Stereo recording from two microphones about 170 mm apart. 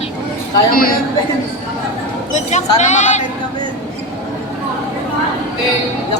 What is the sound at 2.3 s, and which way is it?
Speech, 45° left (ahead or behind).